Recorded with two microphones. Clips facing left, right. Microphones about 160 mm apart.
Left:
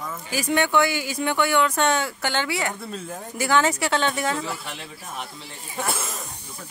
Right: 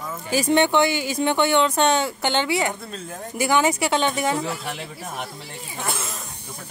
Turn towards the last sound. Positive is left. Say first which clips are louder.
# even
turn(degrees=5)  # may be behind; listen again after turning